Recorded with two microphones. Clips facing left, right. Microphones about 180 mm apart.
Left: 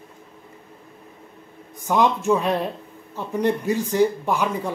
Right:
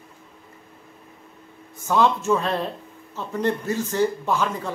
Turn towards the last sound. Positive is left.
turn(degrees=15)  # may be behind; listen again after turning